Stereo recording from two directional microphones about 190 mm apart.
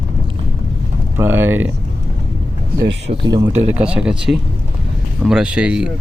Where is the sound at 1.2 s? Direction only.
10° right (ahead or behind).